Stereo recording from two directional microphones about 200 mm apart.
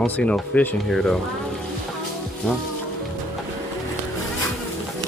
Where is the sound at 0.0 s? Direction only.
5° left (ahead or behind).